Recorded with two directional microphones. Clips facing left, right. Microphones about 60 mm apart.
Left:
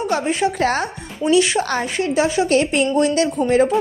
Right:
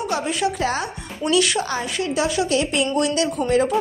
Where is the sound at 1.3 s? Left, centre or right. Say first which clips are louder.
Left 4 dB; left.